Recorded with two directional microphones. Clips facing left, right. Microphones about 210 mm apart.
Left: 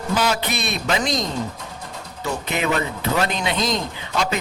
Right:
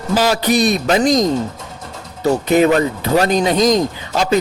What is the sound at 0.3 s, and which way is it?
Speech, 40° right (ahead or behind).